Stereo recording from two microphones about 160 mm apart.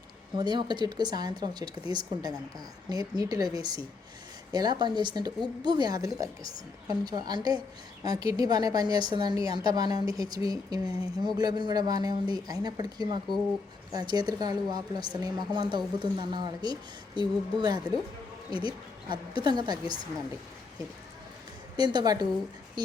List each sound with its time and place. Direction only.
0.3 s a woman's voice: 25° right (ahead or behind)
19.4 s a woman's voice: 25° right (ahead or behind)
21.8 s a woman's voice: 25° right (ahead or behind)